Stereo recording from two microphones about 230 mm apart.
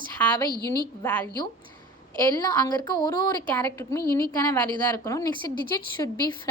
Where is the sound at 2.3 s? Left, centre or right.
Centre.